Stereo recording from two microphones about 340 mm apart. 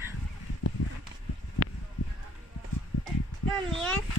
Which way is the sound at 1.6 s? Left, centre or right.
Left.